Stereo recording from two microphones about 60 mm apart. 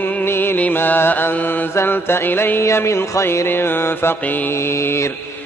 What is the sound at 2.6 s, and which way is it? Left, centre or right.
Mantra, left.